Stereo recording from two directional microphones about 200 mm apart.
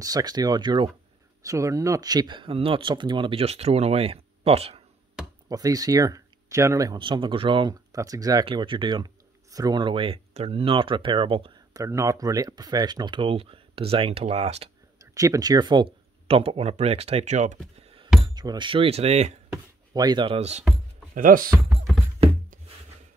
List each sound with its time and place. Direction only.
0.0 s speech: 20° right (ahead or behind)
5.5 s speech: 20° right (ahead or behind)
11.8 s speech: 15° right (ahead or behind); by 14.7 s 30° right (ahead or behind)
15.0 s speech: 15° right (ahead or behind); by 17.6 s 35° right (ahead or behind)
17.7 s a sound: 30° right (ahead or behind)
18.2 s speech: 20° right (ahead or behind)
19.9 s speech: 20° right (ahead or behind)
21.1 s speech: 40° right (ahead or behind)
21.6 s music: centre (ahead or behind)